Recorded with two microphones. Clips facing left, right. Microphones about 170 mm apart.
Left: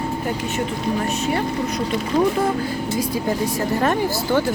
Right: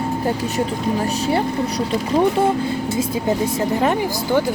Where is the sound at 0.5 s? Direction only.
30° right (ahead or behind).